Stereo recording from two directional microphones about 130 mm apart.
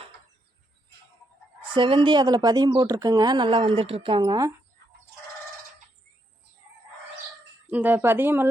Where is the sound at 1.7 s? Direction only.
40° right (ahead or behind).